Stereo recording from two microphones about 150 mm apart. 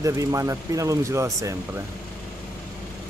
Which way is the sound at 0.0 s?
20° right (ahead or behind).